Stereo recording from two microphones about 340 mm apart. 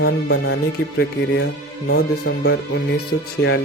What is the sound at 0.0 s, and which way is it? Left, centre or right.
Speech, left.